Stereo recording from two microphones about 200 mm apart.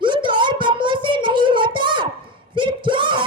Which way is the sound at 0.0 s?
25° right (ahead or behind).